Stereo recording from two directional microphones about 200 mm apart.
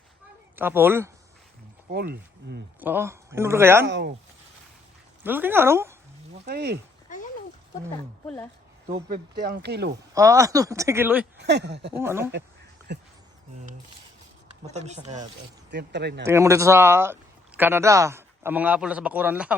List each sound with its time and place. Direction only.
0.5 s a man's voice: 10° right (ahead or behind)
1.9 s speech: 50° right (ahead or behind)
2.8 s a man's voice: 10° right (ahead or behind)
3.8 s speech: 60° right (ahead or behind)
5.2 s a man's voice: 10° right (ahead or behind)
6.4 s speech: 55° right (ahead or behind)
9.4 s speech: 50° right (ahead or behind)
10.2 s a man's voice: 15° right (ahead or behind)
11.3 s speech: 55° right (ahead or behind)
11.9 s a man's voice: 10° right (ahead or behind)
14.7 s speech: 35° right (ahead or behind)
15.7 s speech: 55° right (ahead or behind)
16.2 s a man's voice: 15° right (ahead or behind)